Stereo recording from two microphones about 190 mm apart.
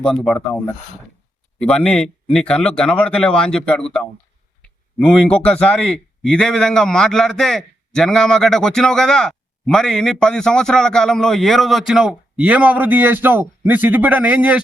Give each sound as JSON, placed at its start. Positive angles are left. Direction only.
{"t": 0.0, "sound": "a man's voice", "side_deg": 0}